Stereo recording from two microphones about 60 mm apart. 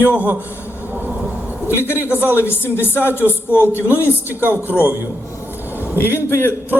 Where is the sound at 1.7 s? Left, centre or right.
Left.